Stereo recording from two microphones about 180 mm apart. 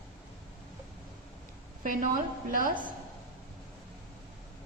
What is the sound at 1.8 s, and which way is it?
Speech, 50° right (ahead or behind).